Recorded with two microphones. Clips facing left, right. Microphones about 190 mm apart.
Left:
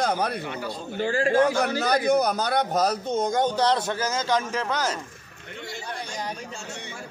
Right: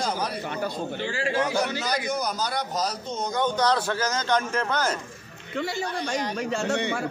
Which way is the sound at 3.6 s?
25° left (ahead or behind).